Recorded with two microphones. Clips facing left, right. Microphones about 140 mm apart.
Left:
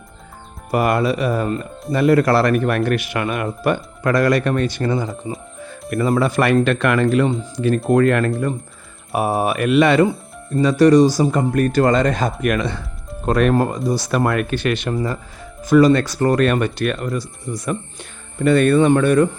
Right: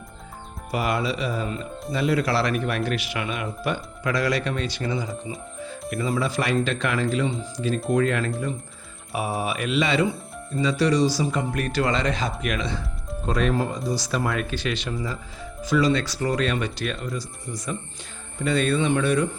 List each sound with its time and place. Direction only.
0.7 s a man's voice: 55° left (ahead or behind)